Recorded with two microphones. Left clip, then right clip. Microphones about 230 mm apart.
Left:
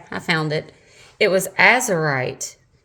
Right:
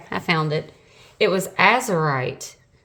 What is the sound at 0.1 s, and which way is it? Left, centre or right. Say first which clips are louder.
A woman's voice: even; centre.